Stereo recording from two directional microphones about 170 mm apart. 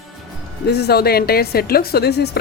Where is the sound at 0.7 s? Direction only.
75° left (ahead or behind).